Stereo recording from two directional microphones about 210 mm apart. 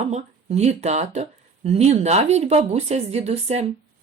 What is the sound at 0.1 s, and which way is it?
Speech, 30° right (ahead or behind).